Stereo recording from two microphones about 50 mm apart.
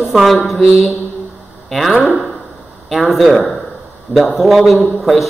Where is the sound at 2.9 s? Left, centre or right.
Centre.